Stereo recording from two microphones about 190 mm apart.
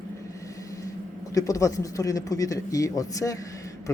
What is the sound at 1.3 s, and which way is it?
Speech, 15° left (ahead or behind).